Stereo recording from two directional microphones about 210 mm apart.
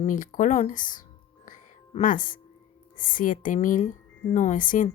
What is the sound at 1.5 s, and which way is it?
Music, 40° left (ahead or behind).